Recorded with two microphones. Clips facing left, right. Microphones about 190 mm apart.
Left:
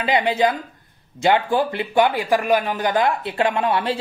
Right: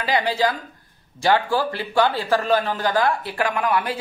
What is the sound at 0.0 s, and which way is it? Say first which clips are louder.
A man's voice: left 3 dB; 20° left (ahead or behind).